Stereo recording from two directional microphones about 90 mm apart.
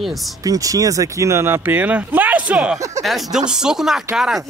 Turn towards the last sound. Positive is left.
turn(degrees=-5)  # may be behind; listen again after turning